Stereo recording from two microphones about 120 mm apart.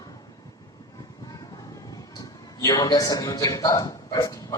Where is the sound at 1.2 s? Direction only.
30° left (ahead or behind).